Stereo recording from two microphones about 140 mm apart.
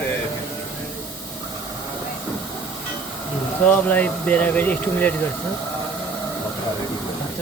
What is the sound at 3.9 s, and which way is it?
Speech, 10° left (ahead or behind).